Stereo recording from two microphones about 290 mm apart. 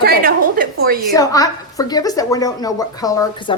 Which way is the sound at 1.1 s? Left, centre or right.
Centre.